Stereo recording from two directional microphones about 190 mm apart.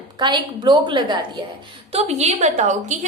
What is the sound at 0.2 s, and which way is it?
A woman's voice, 25° right (ahead or behind).